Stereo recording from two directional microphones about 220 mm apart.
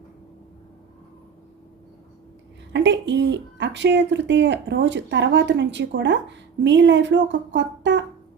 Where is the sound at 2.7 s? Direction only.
55° right (ahead or behind).